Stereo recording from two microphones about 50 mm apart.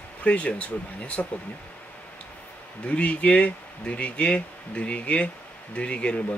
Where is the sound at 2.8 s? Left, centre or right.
Left.